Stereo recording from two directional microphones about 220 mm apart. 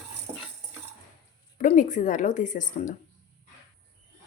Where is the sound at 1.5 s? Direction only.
35° left (ahead or behind).